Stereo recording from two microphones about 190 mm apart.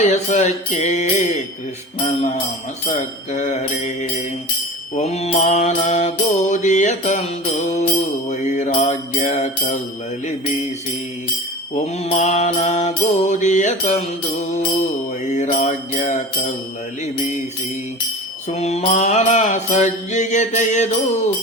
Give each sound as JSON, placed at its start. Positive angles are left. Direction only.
{"t": 0.0, "sound": "mantra", "side_deg": 40}
{"t": 4.9, "sound": "mantra", "side_deg": 35}
{"t": 11.7, "sound": "mantra", "side_deg": 35}
{"t": 15.2, "sound": "mantra", "side_deg": 40}
{"t": 18.4, "sound": "mantra", "side_deg": 35}